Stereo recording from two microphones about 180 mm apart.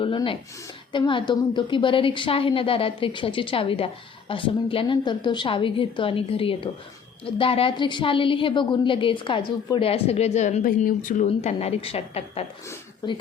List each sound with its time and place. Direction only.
0.0 s a woman's voice: 30° left (ahead or behind)
13.0 s a woman's voice: 25° left (ahead or behind)